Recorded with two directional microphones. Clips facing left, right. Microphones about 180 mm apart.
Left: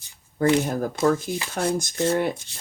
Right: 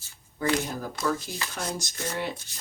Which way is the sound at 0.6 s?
50° left (ahead or behind).